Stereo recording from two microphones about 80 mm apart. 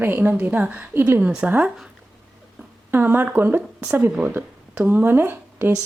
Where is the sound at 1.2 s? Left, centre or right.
Centre.